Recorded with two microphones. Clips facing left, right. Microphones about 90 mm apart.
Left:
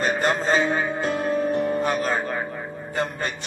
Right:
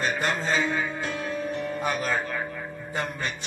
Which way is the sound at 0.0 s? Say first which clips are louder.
Left 5 dB; 40° left (ahead or behind).